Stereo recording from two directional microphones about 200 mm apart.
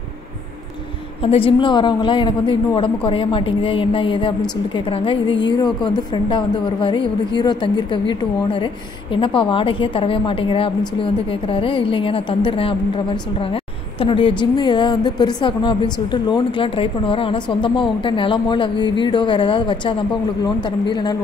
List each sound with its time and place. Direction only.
1.2 s a woman's voice: 25° left (ahead or behind)